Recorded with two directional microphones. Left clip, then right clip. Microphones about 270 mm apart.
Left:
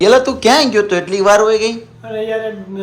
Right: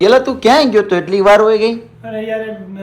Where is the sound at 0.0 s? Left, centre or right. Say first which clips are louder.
Even; centre.